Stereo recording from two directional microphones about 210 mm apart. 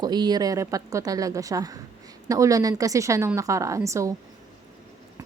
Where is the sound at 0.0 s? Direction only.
20° right (ahead or behind).